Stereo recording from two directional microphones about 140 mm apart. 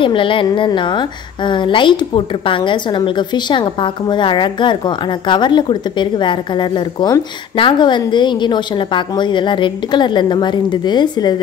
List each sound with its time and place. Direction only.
0.0 s a woman's voice: 35° left (ahead or behind)